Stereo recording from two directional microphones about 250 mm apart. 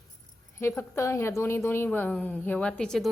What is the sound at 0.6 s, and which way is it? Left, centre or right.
A woman's voice, centre.